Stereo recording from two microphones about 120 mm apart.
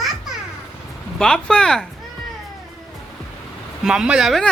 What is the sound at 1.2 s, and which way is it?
Speech, 5° left (ahead or behind).